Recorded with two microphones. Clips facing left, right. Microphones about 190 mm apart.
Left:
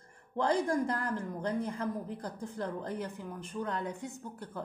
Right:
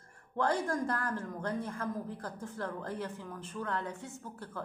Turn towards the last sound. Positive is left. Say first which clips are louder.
# left 1 dB
turn(degrees=15)  # may be behind; listen again after turning